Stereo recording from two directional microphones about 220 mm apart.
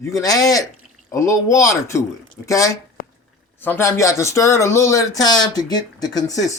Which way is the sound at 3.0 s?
40° left (ahead or behind).